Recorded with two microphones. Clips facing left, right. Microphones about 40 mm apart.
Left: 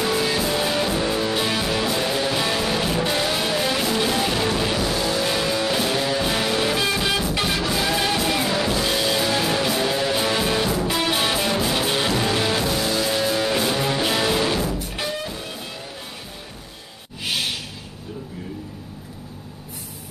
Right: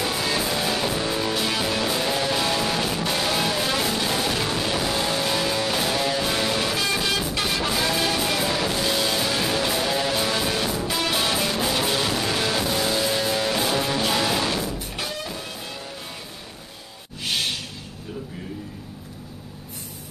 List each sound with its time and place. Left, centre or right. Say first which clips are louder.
0.0 s music: left 3 dB; centre
3.9 s music: left 3 dB; centre
4.9 s music: left 1 dB; centre
5.2 s music: left 2 dB; centre
17.2 s a sound: left 1 dB; centre